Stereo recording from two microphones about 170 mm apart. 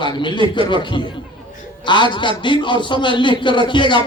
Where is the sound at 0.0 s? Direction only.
30° left (ahead or behind).